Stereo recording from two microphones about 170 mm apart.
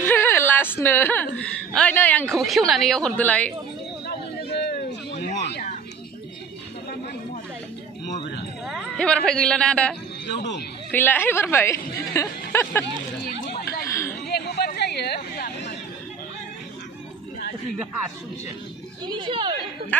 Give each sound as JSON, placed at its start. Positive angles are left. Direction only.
{"t": 0.0, "sound": "a woman's voice", "side_deg": 15}
{"t": 4.0, "sound": "a sound", "side_deg": 70}
{"t": 5.4, "sound": "speech", "side_deg": 85}
{"t": 8.6, "sound": "a man's voice", "side_deg": 0}
{"t": 10.2, "sound": "speech", "side_deg": 90}
{"t": 10.9, "sound": "a woman's voice", "side_deg": 10}
{"t": 13.2, "sound": "chatter", "side_deg": 70}
{"t": 13.8, "sound": "chatter", "side_deg": 15}
{"t": 14.2, "sound": "a sound", "side_deg": 75}
{"t": 19.0, "sound": "speech", "side_deg": -30}
{"t": 19.9, "sound": "a woman's voice", "side_deg": 10}